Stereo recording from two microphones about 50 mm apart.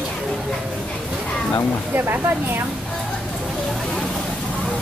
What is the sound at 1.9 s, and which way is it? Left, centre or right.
Speech, right.